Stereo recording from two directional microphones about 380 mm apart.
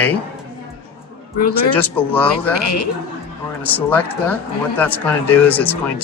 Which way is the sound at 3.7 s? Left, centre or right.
Centre.